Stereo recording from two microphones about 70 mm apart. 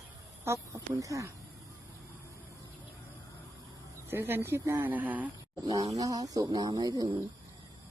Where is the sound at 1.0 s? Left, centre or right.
Right.